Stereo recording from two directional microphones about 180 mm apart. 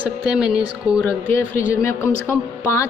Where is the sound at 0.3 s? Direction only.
5° right (ahead or behind).